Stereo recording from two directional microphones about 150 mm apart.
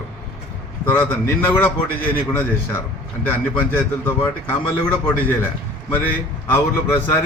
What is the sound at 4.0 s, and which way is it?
A man's voice, 10° left (ahead or behind).